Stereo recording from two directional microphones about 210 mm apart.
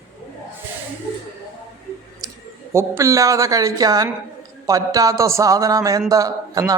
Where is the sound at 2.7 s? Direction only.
15° right (ahead or behind).